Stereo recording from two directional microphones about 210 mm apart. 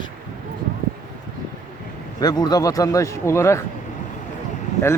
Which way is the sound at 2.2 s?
20° left (ahead or behind).